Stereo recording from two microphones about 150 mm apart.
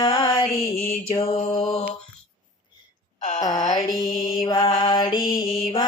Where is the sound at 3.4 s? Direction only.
25° left (ahead or behind).